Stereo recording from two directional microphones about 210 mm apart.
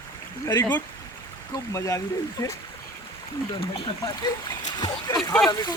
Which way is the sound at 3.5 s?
25° left (ahead or behind).